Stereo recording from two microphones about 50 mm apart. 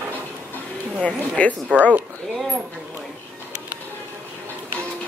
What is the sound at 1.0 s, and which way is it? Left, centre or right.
Speech, left.